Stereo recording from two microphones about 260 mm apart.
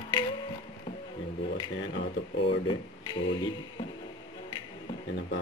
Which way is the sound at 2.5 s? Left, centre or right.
Centre.